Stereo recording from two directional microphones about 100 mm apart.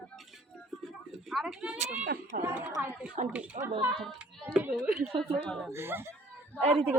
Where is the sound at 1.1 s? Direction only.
5° right (ahead or behind).